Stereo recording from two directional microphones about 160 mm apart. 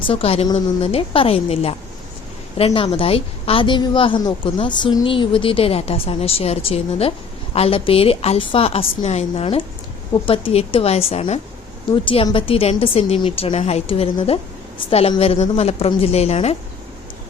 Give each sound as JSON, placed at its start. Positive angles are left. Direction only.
{"t": 0.0, "sound": "a woman's voice", "side_deg": 35}